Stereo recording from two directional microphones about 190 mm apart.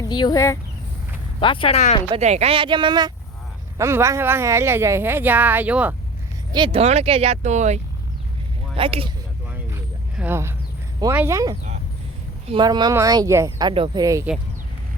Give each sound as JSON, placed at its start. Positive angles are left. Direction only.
{"t": 0.0, "sound": "speech", "side_deg": 20}
{"t": 1.4, "sound": "speech", "side_deg": 25}
{"t": 2.0, "sound": "speech", "side_deg": -35}
{"t": 6.5, "sound": "speech", "side_deg": -25}
{"t": 9.5, "sound": "a sound", "side_deg": -10}
{"t": 11.1, "sound": "speech", "side_deg": -10}